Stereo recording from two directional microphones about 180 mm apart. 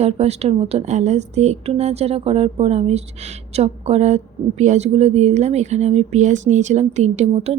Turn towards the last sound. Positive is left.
turn(degrees=-35)  # may be behind; listen again after turning